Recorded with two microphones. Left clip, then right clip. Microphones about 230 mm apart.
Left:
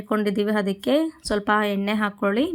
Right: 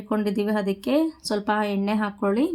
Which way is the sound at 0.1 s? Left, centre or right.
Centre.